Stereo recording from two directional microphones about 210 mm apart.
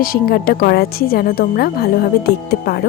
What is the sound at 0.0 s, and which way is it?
A woman's voice, 45° left (ahead or behind).